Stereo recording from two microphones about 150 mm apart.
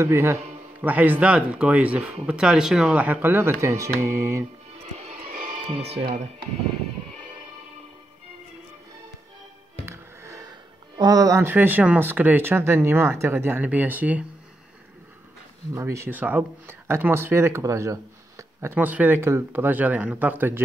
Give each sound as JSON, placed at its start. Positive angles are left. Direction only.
{"t": 0.0, "sound": "speech", "side_deg": -20}
{"t": 3.6, "sound": "mantra", "side_deg": -20}
{"t": 4.9, "sound": "music", "side_deg": -45}
{"t": 5.3, "sound": "music", "side_deg": -75}
{"t": 5.8, "sound": "speech", "side_deg": -40}
{"t": 9.8, "sound": "music", "side_deg": -15}
{"t": 11.0, "sound": "speech", "side_deg": -25}
{"t": 15.7, "sound": "speech", "side_deg": -20}